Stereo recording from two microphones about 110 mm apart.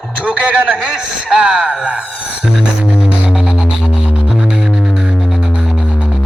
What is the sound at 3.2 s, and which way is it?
Music, 10° right (ahead or behind).